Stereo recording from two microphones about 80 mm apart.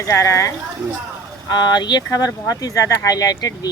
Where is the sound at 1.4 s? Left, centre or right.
Left.